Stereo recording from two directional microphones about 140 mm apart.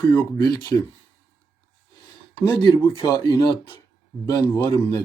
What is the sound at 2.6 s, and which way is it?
A man's voice, 35° left (ahead or behind).